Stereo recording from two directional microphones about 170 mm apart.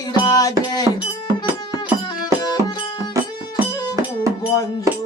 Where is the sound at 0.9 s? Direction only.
20° right (ahead or behind).